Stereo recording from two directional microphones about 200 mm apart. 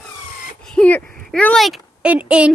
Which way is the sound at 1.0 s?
45° right (ahead or behind).